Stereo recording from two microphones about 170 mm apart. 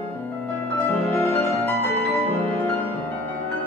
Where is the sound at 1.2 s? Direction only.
15° left (ahead or behind).